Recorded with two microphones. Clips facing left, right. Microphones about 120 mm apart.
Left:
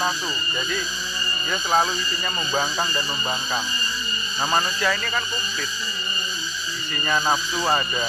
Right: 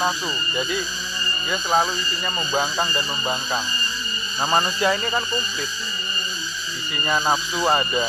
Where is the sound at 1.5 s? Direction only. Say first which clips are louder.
Right 1 dB; 5° right (ahead or behind).